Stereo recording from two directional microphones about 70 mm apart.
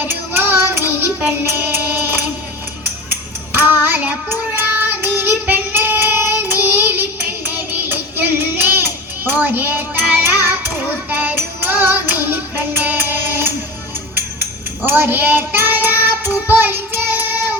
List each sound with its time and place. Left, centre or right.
0.0 s child singing: right